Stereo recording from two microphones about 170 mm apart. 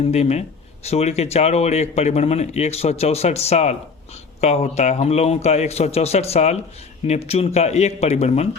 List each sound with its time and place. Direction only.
0.0 s speech: 40° left (ahead or behind)